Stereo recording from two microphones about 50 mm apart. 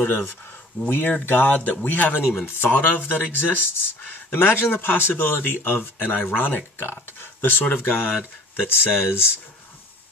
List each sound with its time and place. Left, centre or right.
0.8 s speech: left